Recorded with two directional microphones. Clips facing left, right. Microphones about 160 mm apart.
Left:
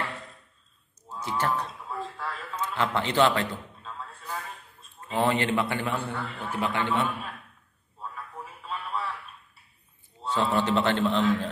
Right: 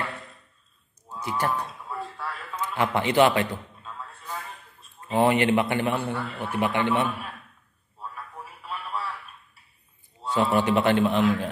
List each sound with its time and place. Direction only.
1.0 s a sound: 10° right (ahead or behind)
2.5 s a man's voice: 10° right (ahead or behind)
5.0 s a man's voice: 15° right (ahead or behind)
10.2 s a man's voice: 10° right (ahead or behind)